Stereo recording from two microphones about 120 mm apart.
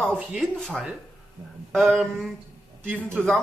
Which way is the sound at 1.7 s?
Centre (ahead or behind).